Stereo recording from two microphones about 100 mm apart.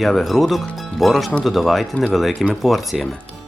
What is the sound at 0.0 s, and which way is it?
Speech, 5° left (ahead or behind).